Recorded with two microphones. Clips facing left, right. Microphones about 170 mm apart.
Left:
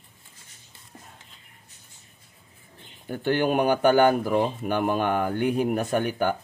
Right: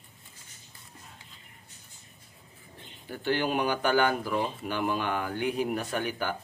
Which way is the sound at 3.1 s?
50° left (ahead or behind).